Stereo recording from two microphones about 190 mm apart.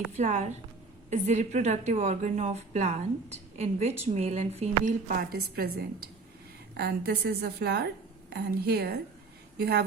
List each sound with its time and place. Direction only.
0.2 s a woman's voice: 40° right (ahead or behind); by 9.8 s 55° right (ahead or behind)